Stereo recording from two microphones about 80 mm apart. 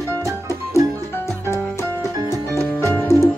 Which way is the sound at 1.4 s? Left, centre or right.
Left.